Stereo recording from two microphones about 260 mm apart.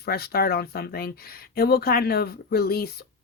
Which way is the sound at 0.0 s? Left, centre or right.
Left.